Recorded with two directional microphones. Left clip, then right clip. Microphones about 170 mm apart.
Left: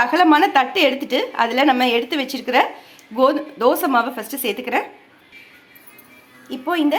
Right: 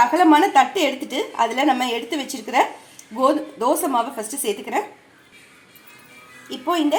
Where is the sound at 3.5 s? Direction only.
20° left (ahead or behind).